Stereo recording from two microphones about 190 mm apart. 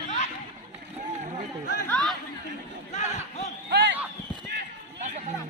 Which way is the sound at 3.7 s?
65° right (ahead or behind).